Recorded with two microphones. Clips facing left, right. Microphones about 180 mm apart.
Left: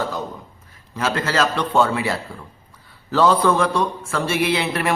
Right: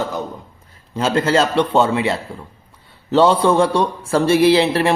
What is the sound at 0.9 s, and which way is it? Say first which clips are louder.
A man's voice: right 5 dB; 30° right (ahead or behind).